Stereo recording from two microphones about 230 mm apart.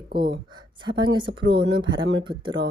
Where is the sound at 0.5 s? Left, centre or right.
Centre.